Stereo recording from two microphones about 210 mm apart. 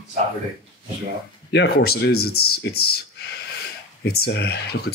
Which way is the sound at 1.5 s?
50° left (ahead or behind).